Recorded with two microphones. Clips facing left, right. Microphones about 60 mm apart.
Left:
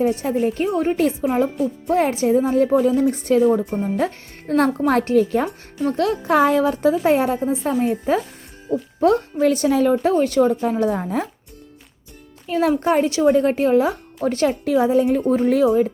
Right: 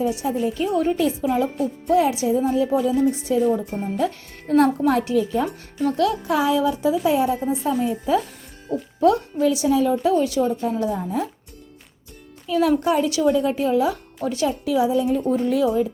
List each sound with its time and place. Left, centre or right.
0.0 s a woman's voice: left
0.7 s a woman's voice: left
12.5 s a woman's voice: left